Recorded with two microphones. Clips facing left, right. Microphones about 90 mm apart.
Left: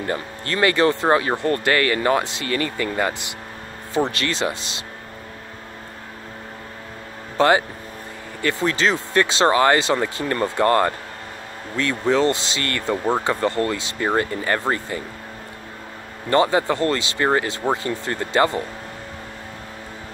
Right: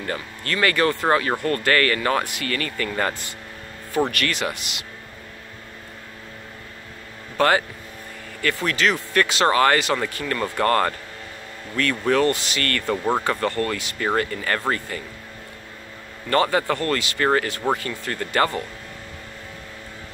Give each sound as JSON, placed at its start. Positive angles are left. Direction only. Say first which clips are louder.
{"t": 0.0, "sound": "speech", "louder": "left 3 dB", "side_deg": 25}
{"t": 7.3, "sound": "speech", "louder": "left 2 dB", "side_deg": 20}
{"t": 16.3, "sound": "speech", "louder": "left 2 dB", "side_deg": 20}